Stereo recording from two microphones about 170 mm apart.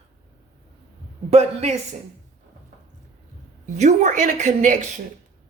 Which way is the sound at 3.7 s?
40° right (ahead or behind).